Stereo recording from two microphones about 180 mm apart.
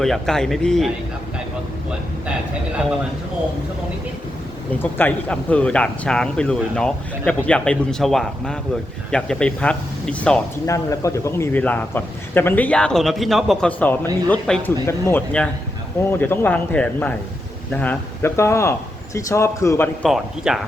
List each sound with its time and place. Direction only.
0.0 s speech: centre (ahead or behind)
4.8 s speech: 10° left (ahead or behind)
10.7 s a man's voice: 15° left (ahead or behind)
20.1 s speech: centre (ahead or behind)